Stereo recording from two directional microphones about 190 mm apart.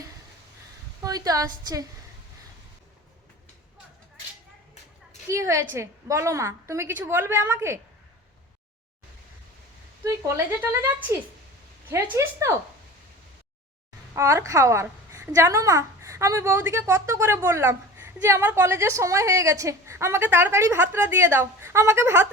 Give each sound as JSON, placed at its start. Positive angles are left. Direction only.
{"t": 1.0, "sound": "a woman's voice", "side_deg": -20}
{"t": 5.3, "sound": "a woman's voice", "side_deg": -15}
{"t": 10.0, "sound": "a woman's voice", "side_deg": -15}
{"t": 11.9, "sound": "a woman's voice", "side_deg": -10}
{"t": 14.2, "sound": "a woman's voice", "side_deg": -15}